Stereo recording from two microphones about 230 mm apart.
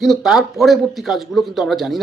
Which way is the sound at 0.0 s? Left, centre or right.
Centre.